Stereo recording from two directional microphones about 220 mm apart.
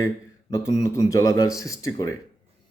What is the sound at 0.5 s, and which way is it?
Speech, 15° left (ahead or behind).